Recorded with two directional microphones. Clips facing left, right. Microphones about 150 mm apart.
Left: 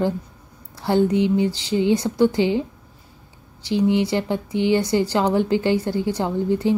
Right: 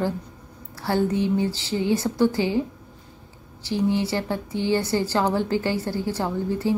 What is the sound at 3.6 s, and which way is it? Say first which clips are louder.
Speech: left 4 dB; 20° left (ahead or behind).